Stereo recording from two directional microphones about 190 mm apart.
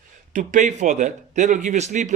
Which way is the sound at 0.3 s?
40° right (ahead or behind).